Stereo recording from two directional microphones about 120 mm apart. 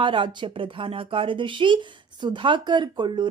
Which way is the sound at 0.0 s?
45° right (ahead or behind).